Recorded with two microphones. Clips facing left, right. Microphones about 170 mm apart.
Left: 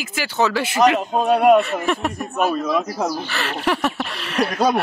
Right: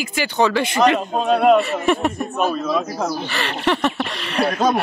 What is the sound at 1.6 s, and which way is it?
Speech, centre (ahead or behind).